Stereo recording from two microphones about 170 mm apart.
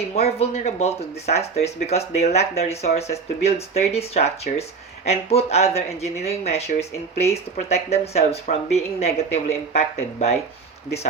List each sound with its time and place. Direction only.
0.0 s speech: 35° left (ahead or behind)